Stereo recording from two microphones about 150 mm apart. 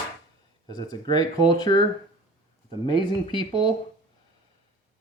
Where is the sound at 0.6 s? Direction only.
25° left (ahead or behind).